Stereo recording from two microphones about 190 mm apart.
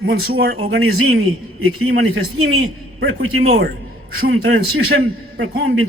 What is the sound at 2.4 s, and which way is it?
Speech, 90° right.